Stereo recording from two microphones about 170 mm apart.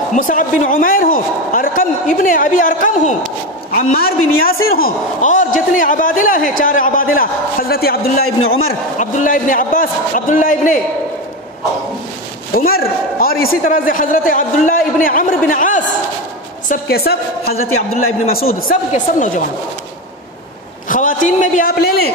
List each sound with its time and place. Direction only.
0.1 s a man's voice: 50° left (ahead or behind)
3.7 s a man's voice: 60° left (ahead or behind)
8.9 s a man's voice: 45° left (ahead or behind)
12.5 s a man's voice: 60° left (ahead or behind)
20.9 s a man's voice: 50° left (ahead or behind)